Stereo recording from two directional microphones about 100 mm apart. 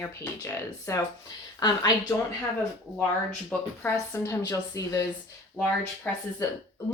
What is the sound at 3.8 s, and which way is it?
A woman's voice, 25° left (ahead or behind).